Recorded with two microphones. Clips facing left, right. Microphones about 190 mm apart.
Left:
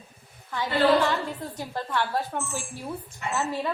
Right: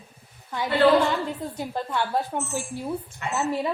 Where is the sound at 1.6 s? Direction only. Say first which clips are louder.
Right 1 dB; 15° right (ahead or behind).